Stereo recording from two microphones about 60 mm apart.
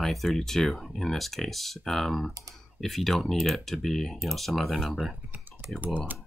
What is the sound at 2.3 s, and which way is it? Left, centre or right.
Speech, right.